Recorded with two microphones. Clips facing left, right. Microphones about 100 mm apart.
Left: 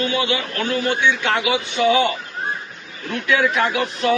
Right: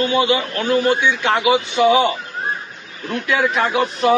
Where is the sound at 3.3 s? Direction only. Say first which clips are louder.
Even; 30° right (ahead or behind).